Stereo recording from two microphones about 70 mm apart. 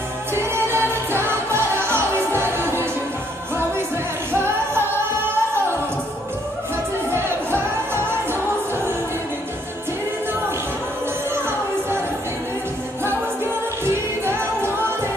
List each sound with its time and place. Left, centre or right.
0.3 s music: right
4.3 s music: right
7.1 s music: right
13.0 s music: right